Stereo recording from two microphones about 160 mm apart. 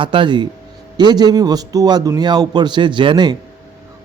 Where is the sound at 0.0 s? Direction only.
30° right (ahead or behind).